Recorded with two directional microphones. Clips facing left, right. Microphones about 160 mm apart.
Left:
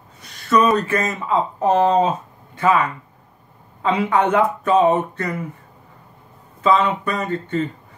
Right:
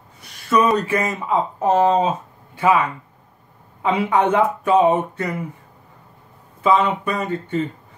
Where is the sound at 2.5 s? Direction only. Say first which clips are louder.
Even; 10° right (ahead or behind).